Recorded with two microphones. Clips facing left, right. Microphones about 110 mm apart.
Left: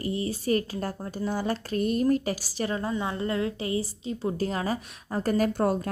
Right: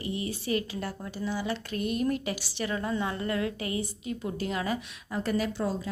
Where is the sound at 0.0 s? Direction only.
40° left (ahead or behind).